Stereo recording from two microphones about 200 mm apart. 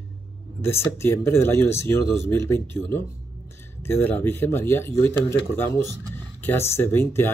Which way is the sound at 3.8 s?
10° left (ahead or behind).